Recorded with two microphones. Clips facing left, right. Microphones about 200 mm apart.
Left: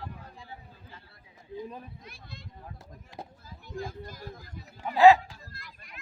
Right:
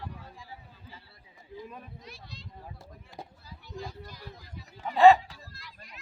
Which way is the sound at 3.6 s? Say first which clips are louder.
Left 3 dB; 50° left (ahead or behind).